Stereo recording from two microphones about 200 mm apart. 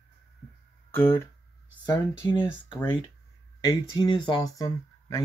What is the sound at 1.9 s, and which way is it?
Speech, 25° left (ahead or behind).